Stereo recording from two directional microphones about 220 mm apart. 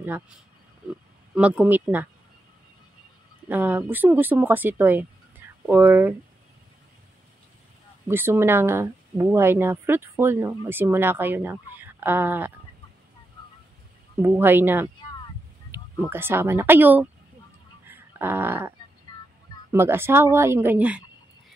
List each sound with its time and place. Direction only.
1.3 s speech: 5° right (ahead or behind)
3.4 s speech: 10° right (ahead or behind)
8.1 s speech: 10° right (ahead or behind)
14.2 s speech: 10° right (ahead or behind)
17.8 s a sound: 10° right (ahead or behind)
19.1 s music: 20° left (ahead or behind)
19.7 s speech: 10° right (ahead or behind)